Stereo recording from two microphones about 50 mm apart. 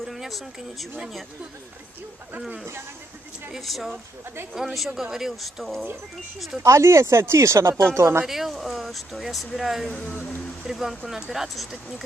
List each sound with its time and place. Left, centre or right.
0.0 s speech: centre
3.6 s speech: centre
6.7 s speech: right
8.2 s speech: centre
9.9 s speech: left
10.7 s speech: centre